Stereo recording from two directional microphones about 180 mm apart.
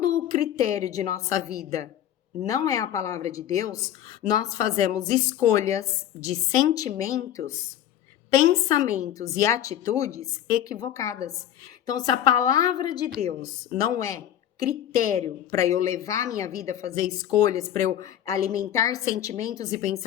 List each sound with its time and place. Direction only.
0.1 s a woman's voice: 20° left (ahead or behind)
8.9 s a woman's voice: 20° left (ahead or behind)